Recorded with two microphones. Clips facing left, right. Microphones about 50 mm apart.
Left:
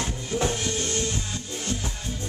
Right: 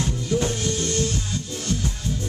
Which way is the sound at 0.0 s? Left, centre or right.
Left.